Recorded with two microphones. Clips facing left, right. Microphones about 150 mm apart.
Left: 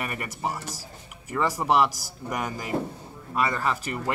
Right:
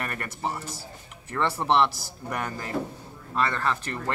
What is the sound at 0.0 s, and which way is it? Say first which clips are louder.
Speech: left 1 dB; 10° left (ahead or behind).